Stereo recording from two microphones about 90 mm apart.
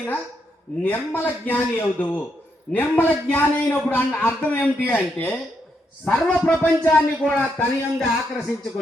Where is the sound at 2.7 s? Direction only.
20° left (ahead or behind).